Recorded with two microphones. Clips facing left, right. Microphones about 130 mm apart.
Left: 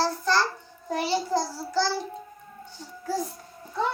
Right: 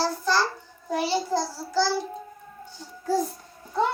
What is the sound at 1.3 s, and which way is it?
Babbling, 10° right (ahead or behind).